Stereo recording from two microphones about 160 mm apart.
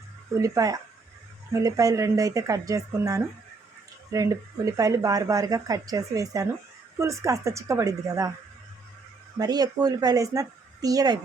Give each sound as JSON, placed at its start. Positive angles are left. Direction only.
{"t": 0.3, "sound": "speech", "side_deg": -20}
{"t": 9.4, "sound": "speech", "side_deg": -25}